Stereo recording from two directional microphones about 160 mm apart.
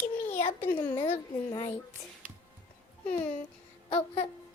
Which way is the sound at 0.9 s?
30° left (ahead or behind).